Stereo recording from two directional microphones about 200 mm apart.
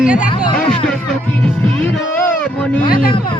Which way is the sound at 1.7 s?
5° left (ahead or behind).